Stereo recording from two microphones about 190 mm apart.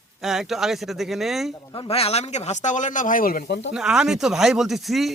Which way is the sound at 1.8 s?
30° left (ahead or behind).